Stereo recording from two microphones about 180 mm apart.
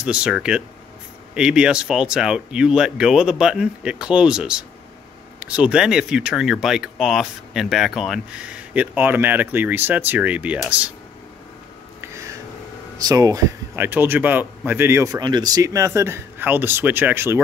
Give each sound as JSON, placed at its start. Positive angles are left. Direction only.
{"t": 0.0, "sound": "speech", "side_deg": -5}
{"t": 12.0, "sound": "a sound", "side_deg": -15}
{"t": 12.9, "sound": "speech", "side_deg": -20}